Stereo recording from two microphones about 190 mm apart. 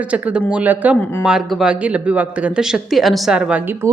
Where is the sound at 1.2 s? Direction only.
5° right (ahead or behind).